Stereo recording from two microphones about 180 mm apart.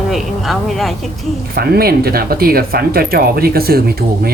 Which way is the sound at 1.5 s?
60° right (ahead or behind).